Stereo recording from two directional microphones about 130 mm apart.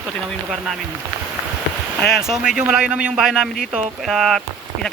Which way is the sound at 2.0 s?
5° right (ahead or behind).